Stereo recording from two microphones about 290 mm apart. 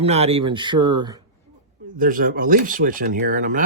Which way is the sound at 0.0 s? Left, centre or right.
Right.